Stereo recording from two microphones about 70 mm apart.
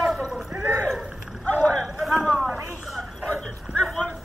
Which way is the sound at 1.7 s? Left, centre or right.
Centre.